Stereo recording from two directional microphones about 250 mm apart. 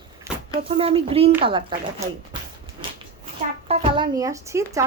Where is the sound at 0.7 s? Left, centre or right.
Right.